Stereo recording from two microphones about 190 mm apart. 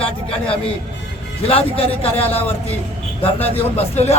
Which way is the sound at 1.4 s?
30° left (ahead or behind).